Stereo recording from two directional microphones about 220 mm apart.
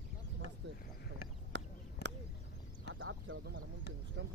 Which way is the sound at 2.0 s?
50° left (ahead or behind).